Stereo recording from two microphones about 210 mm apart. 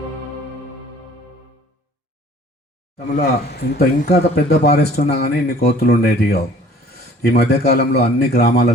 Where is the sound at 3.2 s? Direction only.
50° left (ahead or behind).